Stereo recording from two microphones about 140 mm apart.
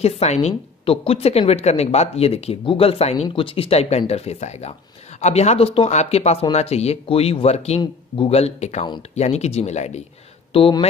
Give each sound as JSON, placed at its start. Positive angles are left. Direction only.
{"t": 0.0, "sound": "a woman's voice", "side_deg": 50}
{"t": 10.5, "sound": "speech", "side_deg": 40}